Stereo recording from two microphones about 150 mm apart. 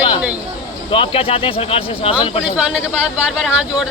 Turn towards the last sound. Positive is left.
turn(degrees=-5)  # may be behind; listen again after turning